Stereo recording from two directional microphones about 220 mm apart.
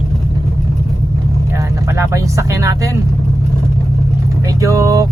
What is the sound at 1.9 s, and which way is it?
Speech, 15° right (ahead or behind).